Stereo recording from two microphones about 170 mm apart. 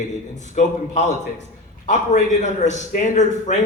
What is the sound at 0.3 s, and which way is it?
A man's voice, 45° left (ahead or behind).